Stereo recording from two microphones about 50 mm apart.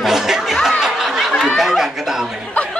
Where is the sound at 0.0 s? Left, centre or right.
Centre.